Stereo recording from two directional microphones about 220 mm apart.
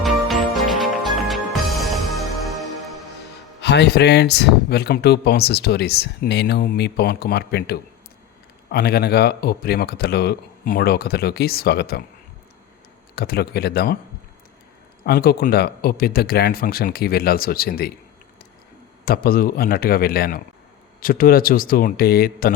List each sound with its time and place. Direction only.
0.0 s music: centre (ahead or behind)
3.6 s speech: 50° left (ahead or behind)
13.1 s speech: 45° left (ahead or behind)
15.0 s speech: 45° left (ahead or behind)
19.0 s a man's voice: 40° left (ahead or behind)